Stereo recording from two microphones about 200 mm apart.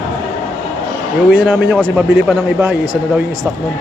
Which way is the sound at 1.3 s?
5° right (ahead or behind).